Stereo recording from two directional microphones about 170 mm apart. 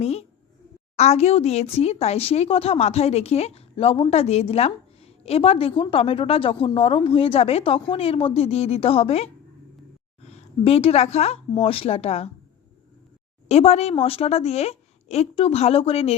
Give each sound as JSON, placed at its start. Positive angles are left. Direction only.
{"t": 0.0, "sound": "speech", "side_deg": 40}
{"t": 13.5, "sound": "speech", "side_deg": 40}